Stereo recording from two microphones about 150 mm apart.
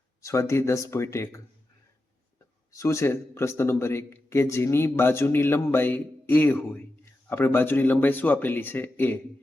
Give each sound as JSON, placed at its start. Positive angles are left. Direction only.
{"t": 0.2, "sound": "speech", "side_deg": 20}
{"t": 2.7, "sound": "a man's voice", "side_deg": 20}